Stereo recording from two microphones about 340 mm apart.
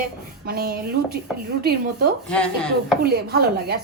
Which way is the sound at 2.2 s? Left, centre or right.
Centre.